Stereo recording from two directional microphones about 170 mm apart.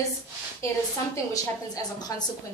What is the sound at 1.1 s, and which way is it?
A woman's voice, 20° left (ahead or behind).